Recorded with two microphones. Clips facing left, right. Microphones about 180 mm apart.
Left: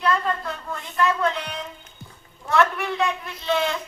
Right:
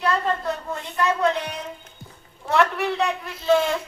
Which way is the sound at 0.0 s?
25° right (ahead or behind).